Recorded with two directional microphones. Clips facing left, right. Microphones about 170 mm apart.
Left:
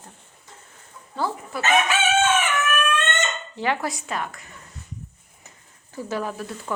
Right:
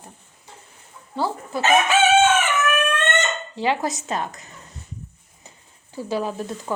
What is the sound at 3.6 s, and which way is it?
Speech, 15° right (ahead or behind).